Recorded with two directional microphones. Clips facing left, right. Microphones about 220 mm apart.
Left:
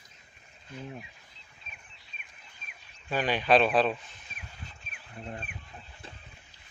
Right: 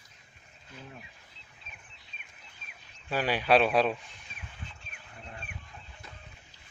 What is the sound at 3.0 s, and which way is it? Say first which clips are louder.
Speech: left 1 dB; 5° right (ahead or behind).